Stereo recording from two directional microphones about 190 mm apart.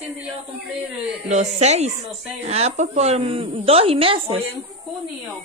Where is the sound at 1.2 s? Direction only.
35° right (ahead or behind).